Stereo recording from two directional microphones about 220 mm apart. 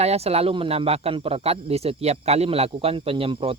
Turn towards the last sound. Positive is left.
turn(degrees=-25)  # may be behind; listen again after turning